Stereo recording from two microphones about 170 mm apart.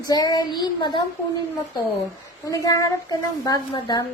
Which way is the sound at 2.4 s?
20° left (ahead or behind).